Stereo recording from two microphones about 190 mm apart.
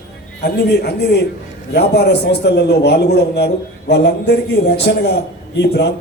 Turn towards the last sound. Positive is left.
turn(degrees=60)  # may be behind; listen again after turning